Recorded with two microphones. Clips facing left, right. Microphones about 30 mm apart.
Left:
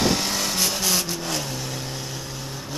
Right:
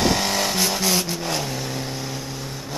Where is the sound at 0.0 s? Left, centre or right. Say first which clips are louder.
Right 2 dB; centre.